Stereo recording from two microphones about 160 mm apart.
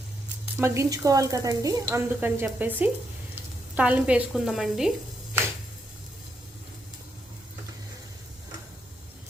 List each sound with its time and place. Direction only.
0.6 s speech: 15° right (ahead or behind); by 4.9 s centre (ahead or behind)